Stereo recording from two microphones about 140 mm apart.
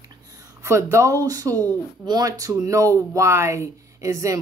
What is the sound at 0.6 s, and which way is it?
Speech, 20° right (ahead or behind).